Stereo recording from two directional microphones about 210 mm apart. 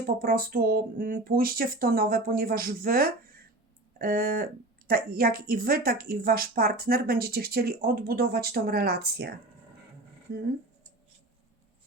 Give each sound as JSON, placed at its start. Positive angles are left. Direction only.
{"t": 0.0, "sound": "speech", "side_deg": -45}